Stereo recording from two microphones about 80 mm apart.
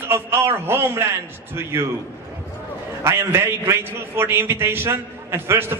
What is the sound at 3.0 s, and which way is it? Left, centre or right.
A man's voice, right.